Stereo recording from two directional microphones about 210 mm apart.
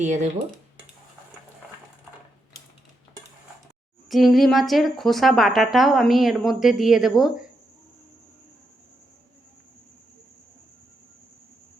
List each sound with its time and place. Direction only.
0.0 s speech: 35° right (ahead or behind)
4.1 s speech: centre (ahead or behind)